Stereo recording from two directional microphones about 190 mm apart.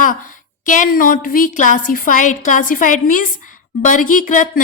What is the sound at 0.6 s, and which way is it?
A woman's voice, 45° left (ahead or behind).